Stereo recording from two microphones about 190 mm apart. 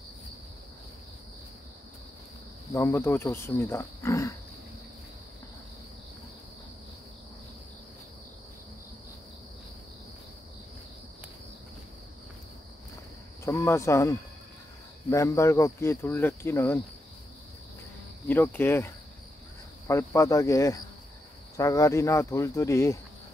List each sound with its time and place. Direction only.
2.7 s speech: 15° left (ahead or behind)
13.4 s cricket: 15° left (ahead or behind)
15.0 s speech: 15° left (ahead or behind)
18.3 s speech: 10° left (ahead or behind)
19.9 s speech: 15° left (ahead or behind)